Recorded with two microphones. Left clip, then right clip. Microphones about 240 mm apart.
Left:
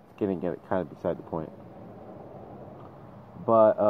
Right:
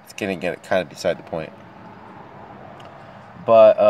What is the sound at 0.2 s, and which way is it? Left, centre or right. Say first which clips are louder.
Speech: right 5 dB; right.